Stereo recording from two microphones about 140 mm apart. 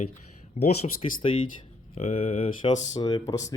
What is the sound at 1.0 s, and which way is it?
Speech, 40° left (ahead or behind).